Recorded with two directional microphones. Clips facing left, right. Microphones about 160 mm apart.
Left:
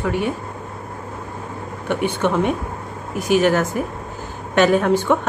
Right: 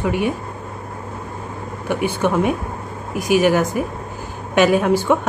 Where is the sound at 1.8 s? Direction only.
10° right (ahead or behind).